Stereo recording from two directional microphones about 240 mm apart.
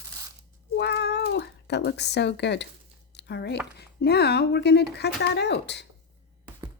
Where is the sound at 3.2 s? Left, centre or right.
Left.